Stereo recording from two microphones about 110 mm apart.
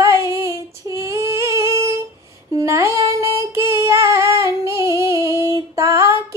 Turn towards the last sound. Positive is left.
turn(degrees=-25)  # may be behind; listen again after turning